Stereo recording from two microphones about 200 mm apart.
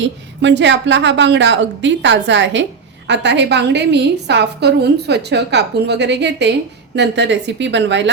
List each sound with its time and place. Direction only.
0.0 s a woman's voice: 65° right (ahead or behind)